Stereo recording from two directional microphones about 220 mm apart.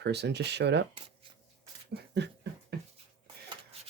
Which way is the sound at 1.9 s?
50° right (ahead or behind).